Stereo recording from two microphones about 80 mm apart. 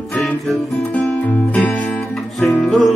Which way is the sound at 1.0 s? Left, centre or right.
Left.